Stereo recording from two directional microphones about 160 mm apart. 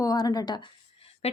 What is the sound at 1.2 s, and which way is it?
Speech, 40° left (ahead or behind).